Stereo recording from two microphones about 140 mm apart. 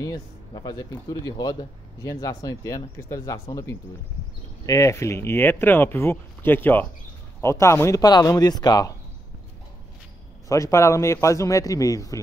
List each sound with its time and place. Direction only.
0.0 s speech: 30° left (ahead or behind)
10.5 s speech: 20° left (ahead or behind)